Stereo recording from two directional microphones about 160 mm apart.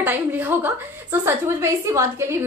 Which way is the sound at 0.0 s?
10° right (ahead or behind).